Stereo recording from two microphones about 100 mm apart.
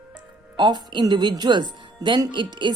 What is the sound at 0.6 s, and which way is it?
Speech, 50° right (ahead or behind).